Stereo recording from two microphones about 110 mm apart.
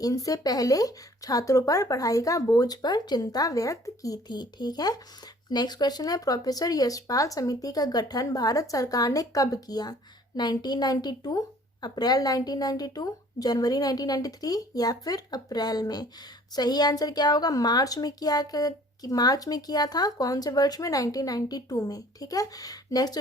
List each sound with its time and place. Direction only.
0.0 s speech: 35° left (ahead or behind)